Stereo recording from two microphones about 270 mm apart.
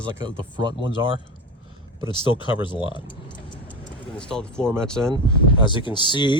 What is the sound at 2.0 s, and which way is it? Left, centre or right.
Speech, centre.